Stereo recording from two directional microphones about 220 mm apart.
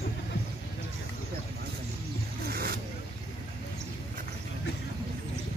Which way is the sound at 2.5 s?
45° right (ahead or behind).